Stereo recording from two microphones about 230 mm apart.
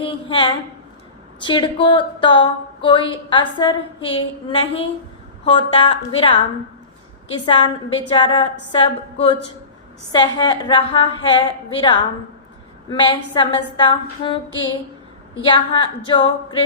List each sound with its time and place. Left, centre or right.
0.0 s a woman's voice: left
7.4 s a woman's voice: left
15.4 s a woman's voice: left